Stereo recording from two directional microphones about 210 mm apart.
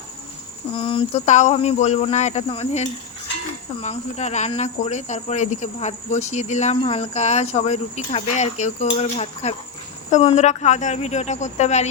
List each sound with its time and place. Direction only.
0.7 s speech: 25° left (ahead or behind)